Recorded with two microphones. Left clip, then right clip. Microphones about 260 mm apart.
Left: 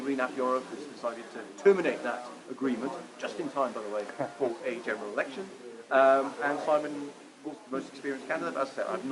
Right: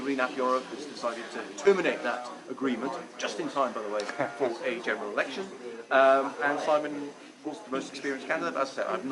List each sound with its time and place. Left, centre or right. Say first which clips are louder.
0.0 s speech: right 2 dB; centre